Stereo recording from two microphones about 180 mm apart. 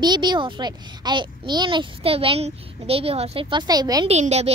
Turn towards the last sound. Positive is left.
turn(degrees=-35)  # may be behind; listen again after turning